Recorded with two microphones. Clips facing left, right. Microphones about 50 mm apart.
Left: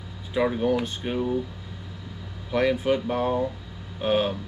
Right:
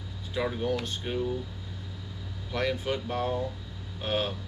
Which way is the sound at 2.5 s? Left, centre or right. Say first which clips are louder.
Left 7 dB; centre.